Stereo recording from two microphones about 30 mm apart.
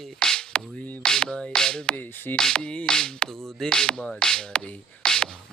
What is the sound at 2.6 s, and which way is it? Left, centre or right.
Music, left.